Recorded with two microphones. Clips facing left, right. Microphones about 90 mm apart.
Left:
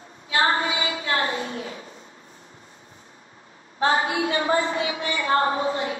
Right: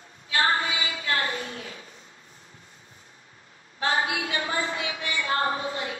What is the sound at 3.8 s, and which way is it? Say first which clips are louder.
A woman's voice: left 5 dB; 35° left (ahead or behind).